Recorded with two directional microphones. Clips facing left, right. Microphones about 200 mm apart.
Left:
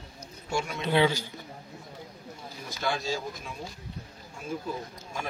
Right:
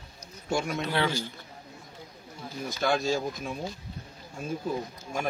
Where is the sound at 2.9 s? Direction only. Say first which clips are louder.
Right 5 dB; 50° right (ahead or behind).